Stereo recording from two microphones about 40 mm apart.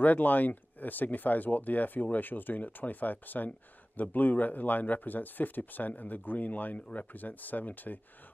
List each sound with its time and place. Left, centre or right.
0.0 s speech: left